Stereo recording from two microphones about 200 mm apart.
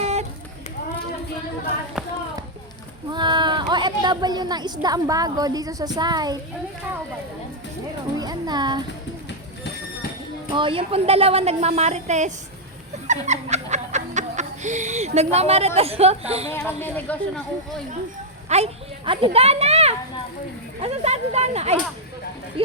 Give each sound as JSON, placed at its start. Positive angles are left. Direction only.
{"t": 0.0, "sound": "run", "side_deg": -35}
{"t": 3.1, "sound": "speech", "side_deg": -20}
{"t": 8.2, "sound": "speech", "side_deg": -20}
{"t": 10.5, "sound": "a woman's voice", "side_deg": -25}
{"t": 16.5, "sound": "speech", "side_deg": 10}
{"t": 18.4, "sound": "a woman's voice", "side_deg": -30}